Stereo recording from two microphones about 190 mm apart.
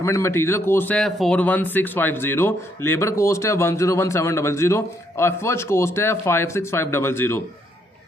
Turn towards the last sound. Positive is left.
turn(degrees=10)  # may be behind; listen again after turning